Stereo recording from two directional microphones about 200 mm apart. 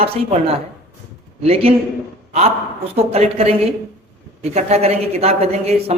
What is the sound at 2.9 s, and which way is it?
Speech, 30° right (ahead or behind).